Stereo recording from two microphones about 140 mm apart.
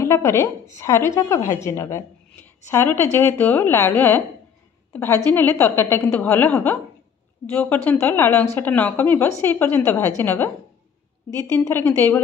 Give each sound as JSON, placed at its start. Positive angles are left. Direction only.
{"t": 0.0, "sound": "a woman's voice", "side_deg": 20}
{"t": 11.5, "sound": "a woman's voice", "side_deg": 15}